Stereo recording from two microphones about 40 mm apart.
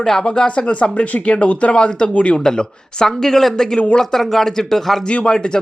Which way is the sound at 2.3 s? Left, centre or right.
Centre.